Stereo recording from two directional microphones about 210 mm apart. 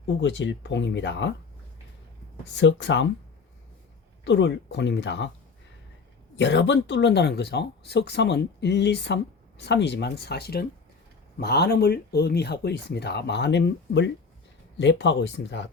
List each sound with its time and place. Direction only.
0.2 s speech: 60° left (ahead or behind)
2.6 s speech: 60° left (ahead or behind)
4.2 s speech: 60° left (ahead or behind)
6.3 s speech: 55° left (ahead or behind)